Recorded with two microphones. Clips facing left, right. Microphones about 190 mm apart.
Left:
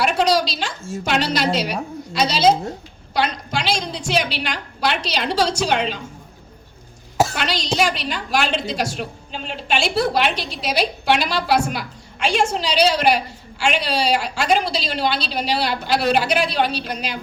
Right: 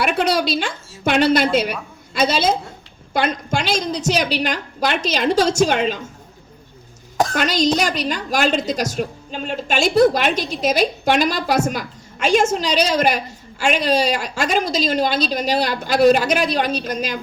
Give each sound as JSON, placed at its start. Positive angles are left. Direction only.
{"t": 0.0, "sound": "a woman's voice", "side_deg": -55}
{"t": 7.3, "sound": "a woman's voice", "side_deg": -45}